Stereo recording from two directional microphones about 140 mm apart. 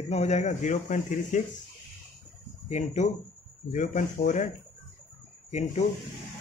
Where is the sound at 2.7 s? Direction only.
55° left (ahead or behind).